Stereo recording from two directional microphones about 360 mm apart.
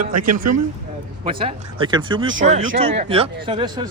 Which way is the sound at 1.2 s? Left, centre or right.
Centre.